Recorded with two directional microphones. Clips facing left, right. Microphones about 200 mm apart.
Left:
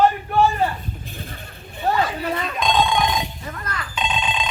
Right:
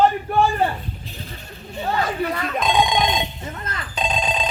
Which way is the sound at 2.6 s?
10° right (ahead or behind).